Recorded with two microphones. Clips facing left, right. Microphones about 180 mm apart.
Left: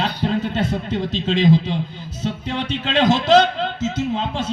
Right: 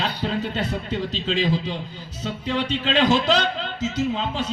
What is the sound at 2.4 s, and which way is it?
A man's voice, 45° left (ahead or behind).